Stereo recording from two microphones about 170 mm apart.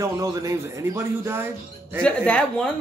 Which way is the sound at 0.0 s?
20° right (ahead or behind).